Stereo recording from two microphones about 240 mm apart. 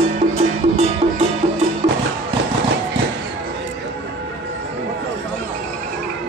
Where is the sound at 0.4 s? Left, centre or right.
Right.